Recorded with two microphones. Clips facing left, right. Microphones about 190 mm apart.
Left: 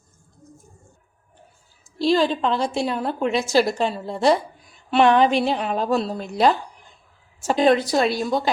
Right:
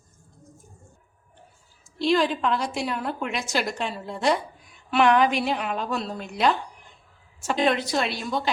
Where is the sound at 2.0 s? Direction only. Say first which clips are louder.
Left 3 dB; 30° left (ahead or behind).